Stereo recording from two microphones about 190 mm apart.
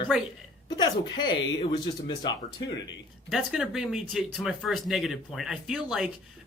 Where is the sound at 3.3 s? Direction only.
5° right (ahead or behind).